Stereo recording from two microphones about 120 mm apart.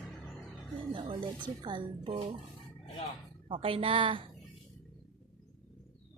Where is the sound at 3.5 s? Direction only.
50° right (ahead or behind).